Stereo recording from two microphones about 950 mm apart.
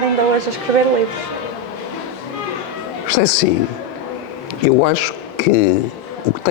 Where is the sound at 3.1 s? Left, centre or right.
Left.